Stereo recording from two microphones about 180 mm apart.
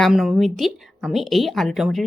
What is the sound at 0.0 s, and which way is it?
A woman's voice, centre (ahead or behind).